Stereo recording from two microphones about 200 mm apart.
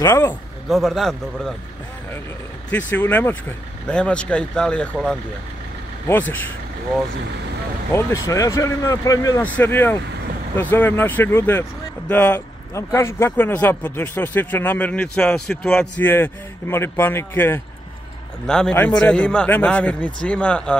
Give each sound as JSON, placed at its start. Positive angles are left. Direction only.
{"t": 0.0, "sound": "speech", "side_deg": 15}
{"t": 0.7, "sound": "a man's voice", "side_deg": 0}
{"t": 3.0, "sound": "a man's voice", "side_deg": 10}
{"t": 7.9, "sound": "a man's voice", "side_deg": 15}